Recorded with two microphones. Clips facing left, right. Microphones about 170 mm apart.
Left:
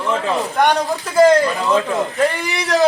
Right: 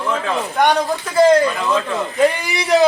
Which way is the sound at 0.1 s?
Centre (ahead or behind).